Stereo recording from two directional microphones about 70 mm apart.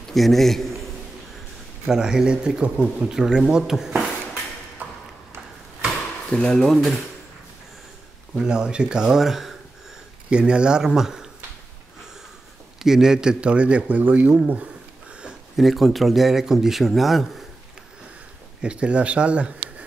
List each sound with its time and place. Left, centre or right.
0.1 s speech: centre
1.9 s speech: centre
6.3 s speech: centre
8.4 s speech: centre
10.3 s speech: centre
12.7 s speech: centre
15.2 s speech: centre
18.6 s speech: centre